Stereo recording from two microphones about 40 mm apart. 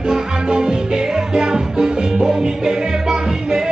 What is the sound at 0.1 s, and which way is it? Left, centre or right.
Music, centre.